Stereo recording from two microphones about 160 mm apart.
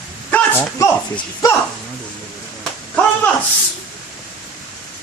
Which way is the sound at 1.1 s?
20° left (ahead or behind).